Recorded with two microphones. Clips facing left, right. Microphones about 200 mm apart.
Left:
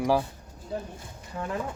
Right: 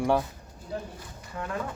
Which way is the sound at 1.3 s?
20° left (ahead or behind).